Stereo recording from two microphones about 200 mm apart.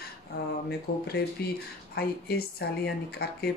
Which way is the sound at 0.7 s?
55° left (ahead or behind).